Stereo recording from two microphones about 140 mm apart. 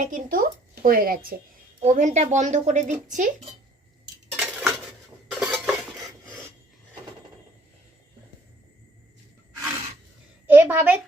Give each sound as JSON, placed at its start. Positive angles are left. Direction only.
{"t": 0.0, "sound": "speech", "side_deg": -75}
{"t": 1.8, "sound": "speech", "side_deg": -60}
{"t": 4.4, "sound": "dishes", "side_deg": 0}
{"t": 10.4, "sound": "a sound", "side_deg": -15}